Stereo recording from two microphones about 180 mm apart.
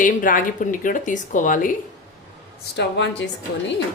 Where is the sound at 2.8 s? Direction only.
75° left (ahead or behind).